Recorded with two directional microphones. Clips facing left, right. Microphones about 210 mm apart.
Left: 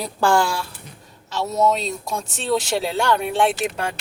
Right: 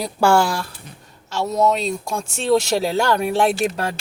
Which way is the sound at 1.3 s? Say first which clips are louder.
Right 1 dB; 5° left (ahead or behind).